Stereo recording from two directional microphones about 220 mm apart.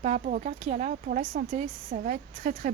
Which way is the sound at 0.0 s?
35° right (ahead or behind).